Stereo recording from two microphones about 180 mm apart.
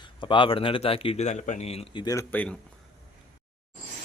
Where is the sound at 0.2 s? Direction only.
25° left (ahead or behind).